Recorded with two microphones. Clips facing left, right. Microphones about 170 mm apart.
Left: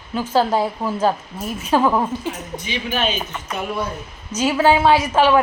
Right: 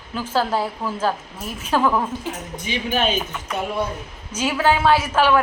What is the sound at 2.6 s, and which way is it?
Speech, 45° right (ahead or behind).